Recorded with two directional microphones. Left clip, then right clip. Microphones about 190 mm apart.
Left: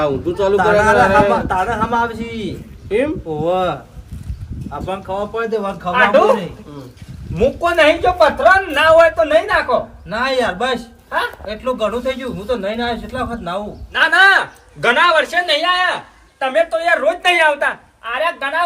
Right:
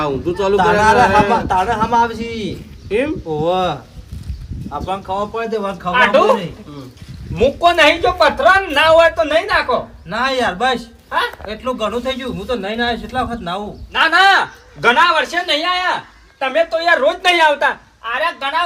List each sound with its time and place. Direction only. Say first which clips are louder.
0.0 s a man's voice: left 1 dB; centre (ahead or behind)
7.8 s speech: left 4 dB; 5° right (ahead or behind)
13.9 s a man's voice: even; 25° right (ahead or behind)
17.2 s a woman's voice: even; 60° right (ahead or behind)
18.0 s a man's voice: even; 20° right (ahead or behind)